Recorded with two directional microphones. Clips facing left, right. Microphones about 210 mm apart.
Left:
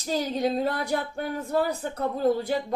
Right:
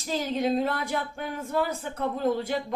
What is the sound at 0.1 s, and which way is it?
Speech, 35° left (ahead or behind).